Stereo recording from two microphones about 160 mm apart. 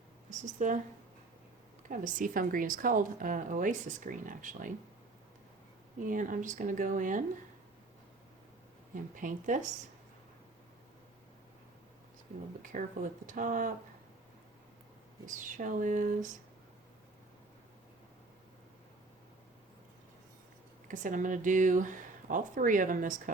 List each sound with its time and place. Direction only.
0.3 s speech: 50° right (ahead or behind)
1.9 s speech: 55° right (ahead or behind)
6.1 s speech: 55° right (ahead or behind)
9.1 s speech: 50° right (ahead or behind)
12.7 s speech: 55° right (ahead or behind)
15.3 s speech: 55° right (ahead or behind)
20.8 s speech: 55° right (ahead or behind)